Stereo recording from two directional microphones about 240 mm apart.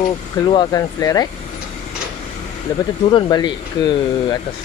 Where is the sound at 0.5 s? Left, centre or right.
Centre.